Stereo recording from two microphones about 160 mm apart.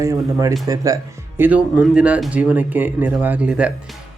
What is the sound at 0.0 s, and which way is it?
Speech, 20° right (ahead or behind).